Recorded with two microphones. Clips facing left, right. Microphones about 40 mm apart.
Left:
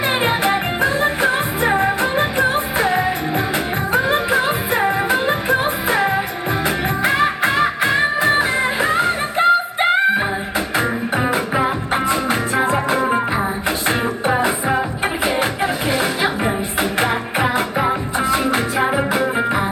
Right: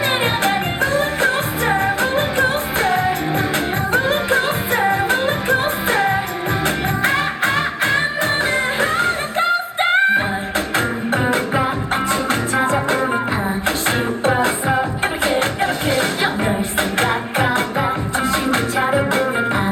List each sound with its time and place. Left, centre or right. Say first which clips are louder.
0.4 s music: left 1 dB; centre
18.8 s music: right 1 dB; centre